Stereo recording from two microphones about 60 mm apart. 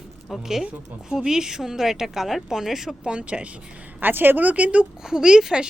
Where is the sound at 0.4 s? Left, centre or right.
Centre.